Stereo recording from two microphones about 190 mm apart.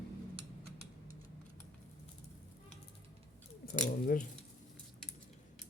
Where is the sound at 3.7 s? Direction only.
50° left (ahead or behind).